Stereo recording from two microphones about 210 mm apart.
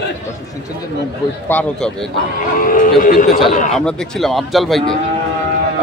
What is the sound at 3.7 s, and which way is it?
A man's voice, centre (ahead or behind).